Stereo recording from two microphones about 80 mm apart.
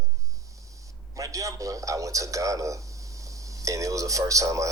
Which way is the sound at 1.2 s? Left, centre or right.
Right.